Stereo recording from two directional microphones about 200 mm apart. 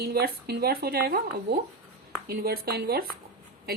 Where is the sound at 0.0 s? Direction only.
50° right (ahead or behind).